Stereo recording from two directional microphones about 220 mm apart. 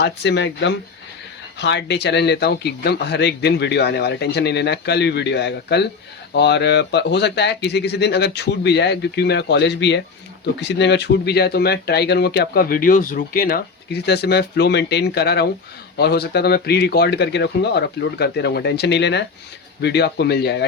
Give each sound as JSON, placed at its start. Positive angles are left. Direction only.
{"t": 0.0, "sound": "speech", "side_deg": 50}